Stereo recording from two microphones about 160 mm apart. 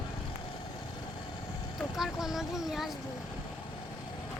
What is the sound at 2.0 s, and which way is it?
Speech, centre (ahead or behind).